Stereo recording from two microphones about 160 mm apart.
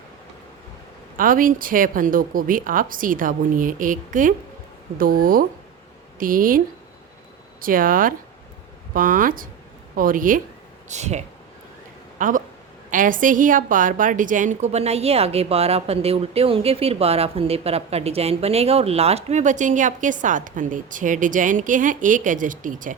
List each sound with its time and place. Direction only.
1.1 s a woman's voice: 60° right (ahead or behind)
7.6 s a woman's voice: 60° right (ahead or behind)
10.8 s speech: 45° right (ahead or behind)
12.2 s a woman's voice: 55° right (ahead or behind)